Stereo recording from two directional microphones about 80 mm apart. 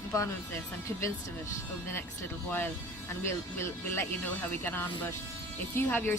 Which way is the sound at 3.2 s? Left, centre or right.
Left.